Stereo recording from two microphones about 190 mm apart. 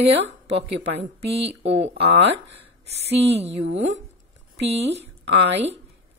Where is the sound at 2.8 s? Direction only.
35° right (ahead or behind).